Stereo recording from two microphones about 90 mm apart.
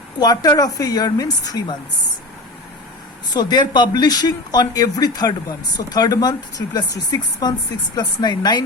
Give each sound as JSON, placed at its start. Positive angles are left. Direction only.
{"t": 0.2, "sound": "speech", "side_deg": 45}
{"t": 3.3, "sound": "speech", "side_deg": 50}